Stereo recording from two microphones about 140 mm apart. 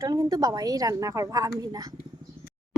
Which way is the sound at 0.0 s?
25° right (ahead or behind).